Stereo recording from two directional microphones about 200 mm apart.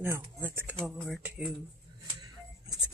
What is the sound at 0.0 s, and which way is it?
Speech, 10° right (ahead or behind).